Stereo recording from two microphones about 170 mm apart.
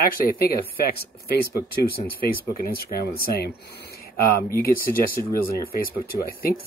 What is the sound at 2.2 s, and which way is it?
Speech, 60° left (ahead or behind).